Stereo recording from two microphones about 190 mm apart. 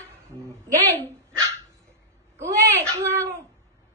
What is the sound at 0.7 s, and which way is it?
Speech, 15° right (ahead or behind).